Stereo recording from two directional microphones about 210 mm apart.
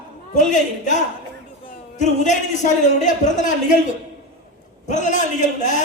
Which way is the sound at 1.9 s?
35° left (ahead or behind).